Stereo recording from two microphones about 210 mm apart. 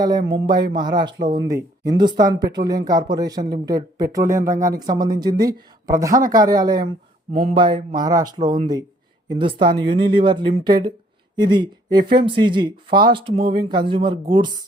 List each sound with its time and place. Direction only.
0.2 s speech: 55° right (ahead or behind)
0.4 s speech: 20° right (ahead or behind)